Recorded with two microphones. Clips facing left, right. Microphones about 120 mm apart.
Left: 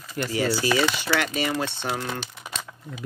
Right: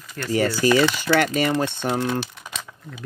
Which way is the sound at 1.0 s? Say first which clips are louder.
Right 5 dB; 45° right (ahead or behind).